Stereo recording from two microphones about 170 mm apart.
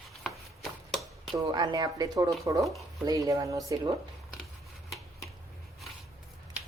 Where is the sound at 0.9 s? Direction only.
Centre (ahead or behind).